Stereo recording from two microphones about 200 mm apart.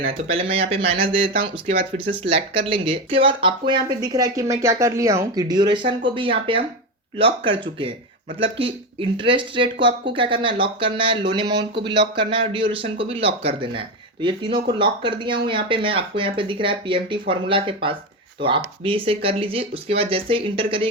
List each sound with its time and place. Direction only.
0.3 s speech: 30° right (ahead or behind)